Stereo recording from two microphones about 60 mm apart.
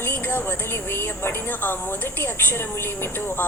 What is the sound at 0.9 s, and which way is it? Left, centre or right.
Speech, left.